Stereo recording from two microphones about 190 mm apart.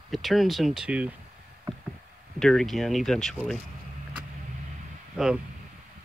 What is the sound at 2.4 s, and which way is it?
Speech, 5° left (ahead or behind).